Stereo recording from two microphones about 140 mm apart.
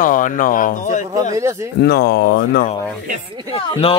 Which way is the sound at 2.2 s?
90° left.